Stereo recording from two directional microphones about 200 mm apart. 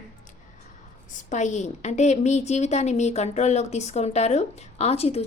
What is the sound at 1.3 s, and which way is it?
A woman's voice, 35° left (ahead or behind).